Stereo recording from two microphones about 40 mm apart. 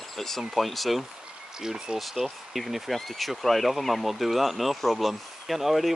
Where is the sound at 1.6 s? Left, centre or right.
Centre.